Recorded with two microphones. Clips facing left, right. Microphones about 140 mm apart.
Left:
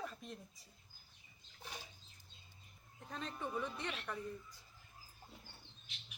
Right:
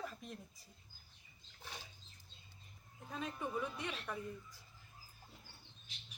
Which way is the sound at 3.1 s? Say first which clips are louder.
Right 1 dB; 10° right (ahead or behind).